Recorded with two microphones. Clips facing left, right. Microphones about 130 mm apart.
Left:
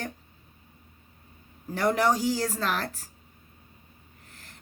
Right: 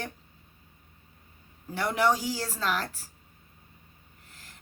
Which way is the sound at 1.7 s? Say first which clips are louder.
Left 2 dB; 40° left (ahead or behind).